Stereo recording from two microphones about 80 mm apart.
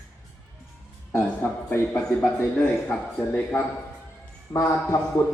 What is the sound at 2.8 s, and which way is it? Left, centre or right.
Speech, centre.